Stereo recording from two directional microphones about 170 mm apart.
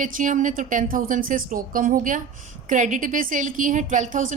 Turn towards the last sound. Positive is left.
turn(degrees=-45)  # may be behind; listen again after turning